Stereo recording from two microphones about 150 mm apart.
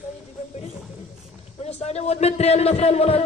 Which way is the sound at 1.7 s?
45° left (ahead or behind).